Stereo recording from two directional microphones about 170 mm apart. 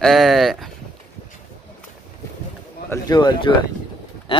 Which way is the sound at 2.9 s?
25° left (ahead or behind).